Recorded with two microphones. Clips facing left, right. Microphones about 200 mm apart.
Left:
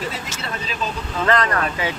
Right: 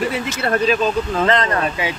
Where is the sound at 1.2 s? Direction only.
25° right (ahead or behind).